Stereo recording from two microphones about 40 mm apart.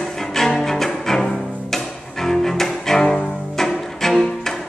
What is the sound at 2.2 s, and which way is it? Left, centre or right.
Cello, centre.